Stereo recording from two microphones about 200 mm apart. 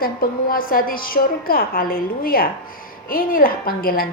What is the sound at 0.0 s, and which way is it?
A woman's voice, 45° left (ahead or behind).